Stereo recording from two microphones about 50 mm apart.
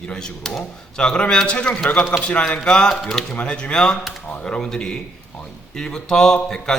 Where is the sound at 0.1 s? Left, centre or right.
Centre.